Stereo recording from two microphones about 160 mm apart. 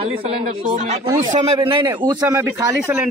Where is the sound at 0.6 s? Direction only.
45° right (ahead or behind).